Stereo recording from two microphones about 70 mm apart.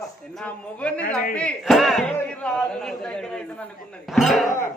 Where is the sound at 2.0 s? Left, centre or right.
Centre.